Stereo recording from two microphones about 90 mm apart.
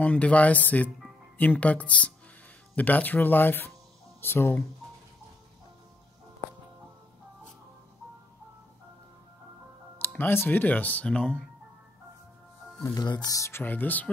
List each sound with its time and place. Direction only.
0.0 s speech: 15° left (ahead or behind)
9.9 s speech: 20° left (ahead or behind)
12.9 s speech: 55° left (ahead or behind)
13.3 s speech: 30° left (ahead or behind)